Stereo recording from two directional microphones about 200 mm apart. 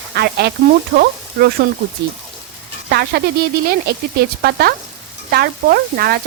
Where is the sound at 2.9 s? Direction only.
50° right (ahead or behind).